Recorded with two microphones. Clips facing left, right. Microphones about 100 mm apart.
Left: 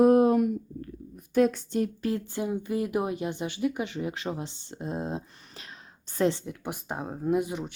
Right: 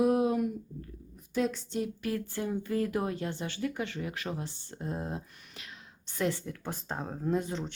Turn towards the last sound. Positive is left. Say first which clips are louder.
# left 4 dB
turn(degrees=10)  # may be behind; listen again after turning